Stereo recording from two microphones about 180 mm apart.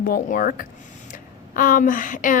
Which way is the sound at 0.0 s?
50° left (ahead or behind).